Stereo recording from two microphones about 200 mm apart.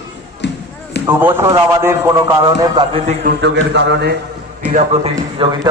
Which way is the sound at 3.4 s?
60° right (ahead or behind).